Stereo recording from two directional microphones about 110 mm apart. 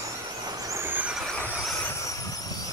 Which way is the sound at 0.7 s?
20° right (ahead or behind).